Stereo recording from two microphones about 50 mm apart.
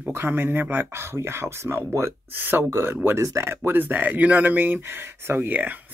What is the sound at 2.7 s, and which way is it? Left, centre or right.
Speech, right.